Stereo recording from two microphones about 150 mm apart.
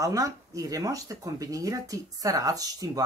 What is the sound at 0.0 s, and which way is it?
A woman's voice, 20° right (ahead or behind).